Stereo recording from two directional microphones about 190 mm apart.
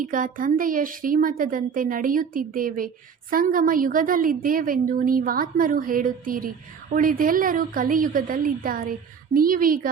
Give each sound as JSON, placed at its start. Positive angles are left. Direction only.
{"t": 0.0, "sound": "a woman's voice", "side_deg": -45}